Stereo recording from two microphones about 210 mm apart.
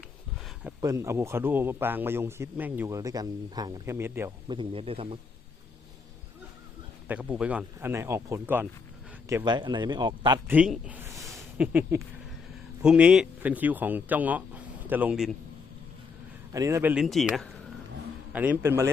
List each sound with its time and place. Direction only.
0.8 s a man's voice: 15° right (ahead or behind)
4.4 s a man's voice: 25° right (ahead or behind)
7.1 s a man's voice: 5° right (ahead or behind)
10.5 s speech: 5° right (ahead or behind)
16.5 s a man's voice: 15° right (ahead or behind)